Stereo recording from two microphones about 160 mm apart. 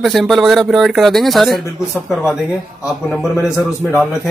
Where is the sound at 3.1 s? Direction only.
Centre (ahead or behind).